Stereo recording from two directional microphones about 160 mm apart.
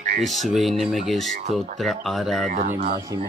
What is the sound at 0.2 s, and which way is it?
Speech, centre (ahead or behind).